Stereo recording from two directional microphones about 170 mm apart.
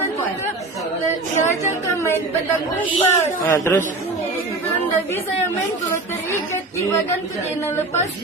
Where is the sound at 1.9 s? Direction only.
15° left (ahead or behind).